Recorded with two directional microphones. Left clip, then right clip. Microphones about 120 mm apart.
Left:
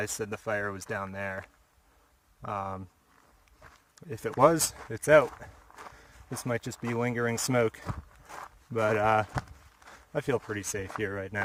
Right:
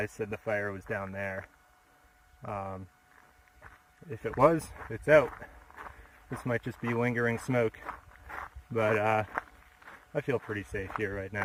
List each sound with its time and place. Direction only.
0.0 s speech: 35° left (ahead or behind)
2.4 s speech: 35° left (ahead or behind)
4.1 s speech: 30° left (ahead or behind)
5.7 s a sound: 15° left (ahead or behind)
6.7 s speech: 10° left (ahead or behind)
7.5 s speech: 40° left (ahead or behind)
7.9 s walk: 10° left (ahead or behind)
8.7 s speech: 25° left (ahead or behind)
10.4 s speech: 20° left (ahead or behind)